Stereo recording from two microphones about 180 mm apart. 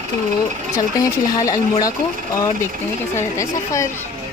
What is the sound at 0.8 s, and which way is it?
Speech, 20° left (ahead or behind).